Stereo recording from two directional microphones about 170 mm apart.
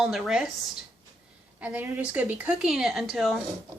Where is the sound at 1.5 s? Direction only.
10° right (ahead or behind).